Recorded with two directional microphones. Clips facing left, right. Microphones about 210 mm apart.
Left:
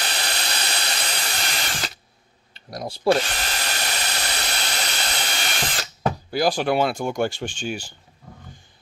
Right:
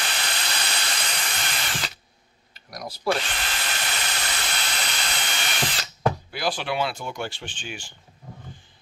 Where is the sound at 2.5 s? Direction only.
30° left (ahead or behind).